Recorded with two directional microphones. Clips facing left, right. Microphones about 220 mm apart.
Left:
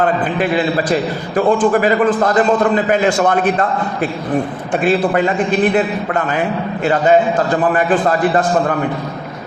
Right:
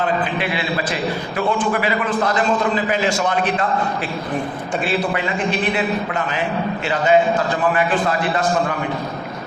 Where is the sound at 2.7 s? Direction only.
55° left (ahead or behind).